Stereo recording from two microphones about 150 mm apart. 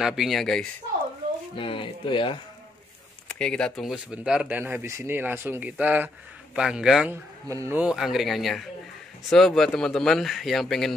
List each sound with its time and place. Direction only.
0.0 s speech: centre (ahead or behind)
1.6 s speech: 35° left (ahead or behind)
3.3 s speech: 5° left (ahead or behind)
7.4 s speech: 20° right (ahead or behind)
7.8 s speech: 5° right (ahead or behind)